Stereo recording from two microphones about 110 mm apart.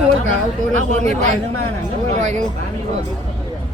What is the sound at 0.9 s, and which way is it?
Speech, 90° right.